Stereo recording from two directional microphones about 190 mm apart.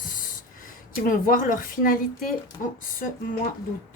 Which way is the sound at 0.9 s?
45° left (ahead or behind).